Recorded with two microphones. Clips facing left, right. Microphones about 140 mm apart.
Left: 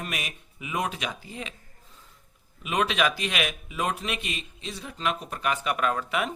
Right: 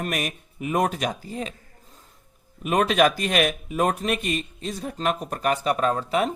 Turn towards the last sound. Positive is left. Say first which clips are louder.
# right 4 dB
turn(degrees=-35)  # may be behind; listen again after turning